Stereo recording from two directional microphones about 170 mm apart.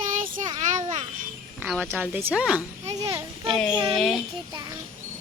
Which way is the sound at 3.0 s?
20° right (ahead or behind).